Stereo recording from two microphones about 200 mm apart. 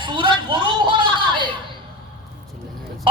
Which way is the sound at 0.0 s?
25° right (ahead or behind).